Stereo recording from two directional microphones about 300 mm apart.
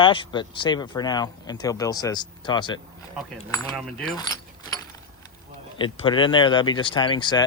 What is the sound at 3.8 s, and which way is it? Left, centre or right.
Speech, centre.